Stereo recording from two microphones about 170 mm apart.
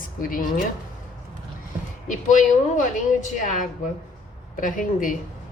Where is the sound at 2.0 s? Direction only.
45° left (ahead or behind).